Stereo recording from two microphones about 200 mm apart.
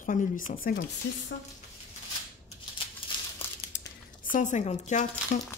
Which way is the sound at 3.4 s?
25° left (ahead or behind).